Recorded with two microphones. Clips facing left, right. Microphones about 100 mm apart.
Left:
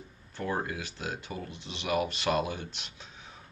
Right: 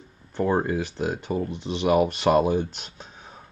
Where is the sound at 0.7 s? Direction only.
50° right (ahead or behind).